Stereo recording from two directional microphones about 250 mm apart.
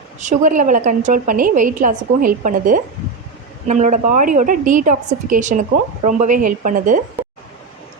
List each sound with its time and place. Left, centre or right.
0.3 s a woman's voice: right